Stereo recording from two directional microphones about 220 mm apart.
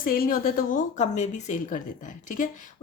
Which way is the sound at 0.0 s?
40° left (ahead or behind).